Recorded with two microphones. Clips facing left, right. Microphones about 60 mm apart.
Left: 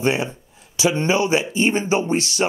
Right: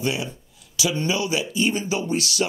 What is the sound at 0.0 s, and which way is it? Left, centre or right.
Speech, left.